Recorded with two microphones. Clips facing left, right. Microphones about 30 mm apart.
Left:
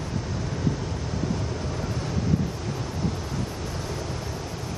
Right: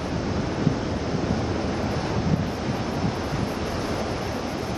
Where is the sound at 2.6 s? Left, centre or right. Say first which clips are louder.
Right 4 dB; right.